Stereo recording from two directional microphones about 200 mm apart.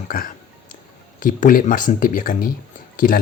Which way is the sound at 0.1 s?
45° left (ahead or behind).